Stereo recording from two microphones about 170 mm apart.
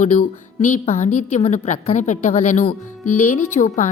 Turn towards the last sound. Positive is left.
turn(degrees=45)  # may be behind; listen again after turning